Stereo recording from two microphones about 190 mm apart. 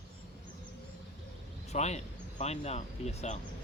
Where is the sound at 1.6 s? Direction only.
35° left (ahead or behind).